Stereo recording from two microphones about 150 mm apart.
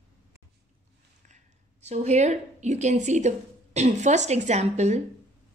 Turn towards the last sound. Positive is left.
turn(degrees=-50)  # may be behind; listen again after turning